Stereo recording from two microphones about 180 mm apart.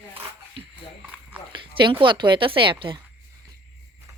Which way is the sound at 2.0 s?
25° right (ahead or behind).